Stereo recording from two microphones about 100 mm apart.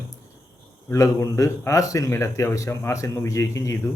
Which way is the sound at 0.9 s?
30° left (ahead or behind).